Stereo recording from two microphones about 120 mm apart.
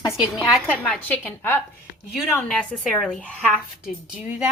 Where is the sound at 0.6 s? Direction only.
10° left (ahead or behind).